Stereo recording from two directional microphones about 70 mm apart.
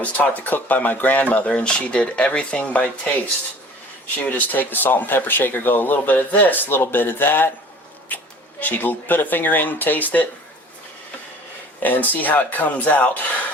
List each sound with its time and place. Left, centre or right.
0.0 s speech: left
8.1 s a sound: left
8.6 s speech: left
11.8 s speech: left